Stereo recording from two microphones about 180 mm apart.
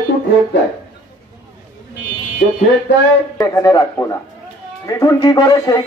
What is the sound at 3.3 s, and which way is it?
A man's voice, 20° left (ahead or behind).